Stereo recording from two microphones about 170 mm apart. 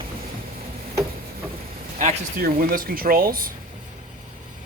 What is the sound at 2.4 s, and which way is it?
Speech, 60° right (ahead or behind).